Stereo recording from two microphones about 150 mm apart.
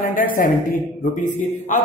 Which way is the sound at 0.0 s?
65° left (ahead or behind).